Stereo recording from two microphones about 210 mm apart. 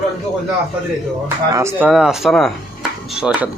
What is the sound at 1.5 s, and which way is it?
Speech, 15° right (ahead or behind).